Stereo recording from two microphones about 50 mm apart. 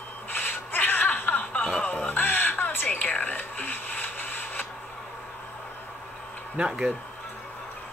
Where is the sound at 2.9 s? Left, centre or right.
Left.